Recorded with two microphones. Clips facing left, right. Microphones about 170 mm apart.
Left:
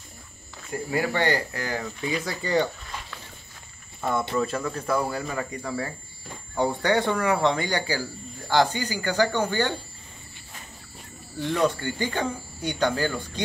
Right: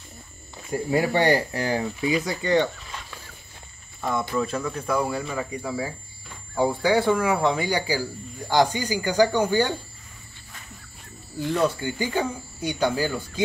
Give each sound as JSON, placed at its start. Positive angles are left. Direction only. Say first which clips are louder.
{"t": 0.7, "sound": "speech", "louder": "right 4 dB", "side_deg": -20}
{"t": 2.1, "sound": "speech", "louder": "right 2 dB", "side_deg": 5}
{"t": 4.0, "sound": "speech", "louder": "even", "side_deg": 5}
{"t": 5.2, "sound": "speech", "louder": "right 1 dB", "side_deg": -10}
{"t": 11.3, "sound": "speech", "louder": "right 1 dB", "side_deg": -10}